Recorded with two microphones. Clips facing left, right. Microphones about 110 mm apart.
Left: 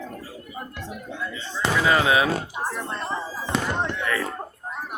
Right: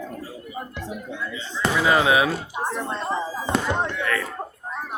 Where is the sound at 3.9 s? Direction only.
10° left (ahead or behind).